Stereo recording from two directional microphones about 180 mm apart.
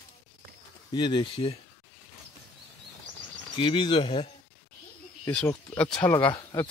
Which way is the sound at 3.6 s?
30° left (ahead or behind).